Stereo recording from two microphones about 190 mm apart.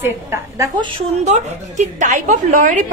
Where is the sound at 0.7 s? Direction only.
25° right (ahead or behind).